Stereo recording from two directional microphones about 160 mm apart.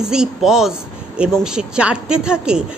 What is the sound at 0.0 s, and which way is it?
A woman's voice, 5° right (ahead or behind).